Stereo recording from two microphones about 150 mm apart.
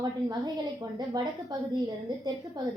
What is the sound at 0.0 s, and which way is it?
A woman's voice, 30° right (ahead or behind).